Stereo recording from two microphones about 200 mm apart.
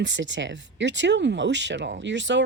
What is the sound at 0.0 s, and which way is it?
Speech, 65° right (ahead or behind).